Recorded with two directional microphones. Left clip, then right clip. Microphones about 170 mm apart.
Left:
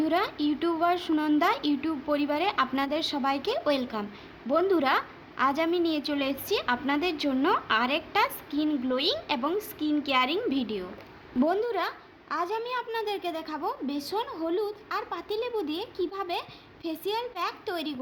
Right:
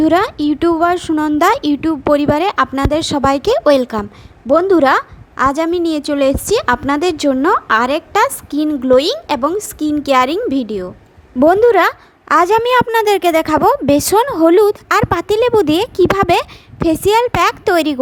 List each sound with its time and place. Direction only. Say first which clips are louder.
0.0 s a woman's voice: right 14 dB; 55° right (ahead or behind)